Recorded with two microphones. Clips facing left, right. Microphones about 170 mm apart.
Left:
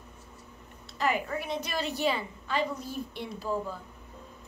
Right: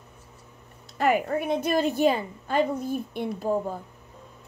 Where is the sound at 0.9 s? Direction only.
50° right (ahead or behind).